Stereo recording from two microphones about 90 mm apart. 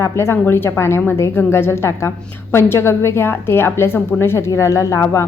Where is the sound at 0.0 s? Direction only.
30° left (ahead or behind).